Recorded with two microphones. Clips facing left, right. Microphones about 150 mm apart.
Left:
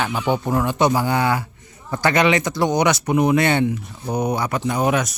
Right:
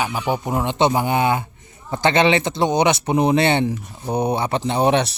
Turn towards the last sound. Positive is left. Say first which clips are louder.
# right 2 dB
turn(degrees=-30)  # may be behind; listen again after turning